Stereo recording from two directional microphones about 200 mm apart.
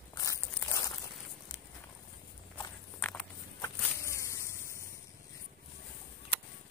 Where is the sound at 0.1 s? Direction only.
15° left (ahead or behind).